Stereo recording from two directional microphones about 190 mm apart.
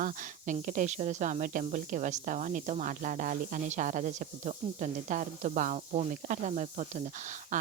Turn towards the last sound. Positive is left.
turn(degrees=-40)  # may be behind; listen again after turning